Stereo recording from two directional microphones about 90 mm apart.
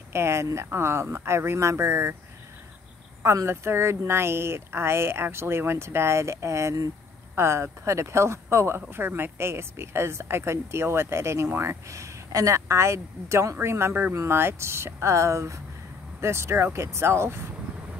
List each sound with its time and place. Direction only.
0.1 s speech: 30° right (ahead or behind)
3.2 s speech: 30° right (ahead or behind)